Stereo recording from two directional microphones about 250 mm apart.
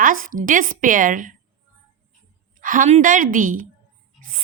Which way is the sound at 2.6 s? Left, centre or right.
Right.